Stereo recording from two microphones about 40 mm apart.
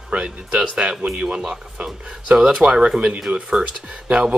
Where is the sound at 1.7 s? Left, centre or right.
Right.